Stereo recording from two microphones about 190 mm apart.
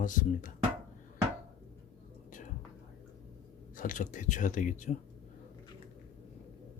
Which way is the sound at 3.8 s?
45° left (ahead or behind).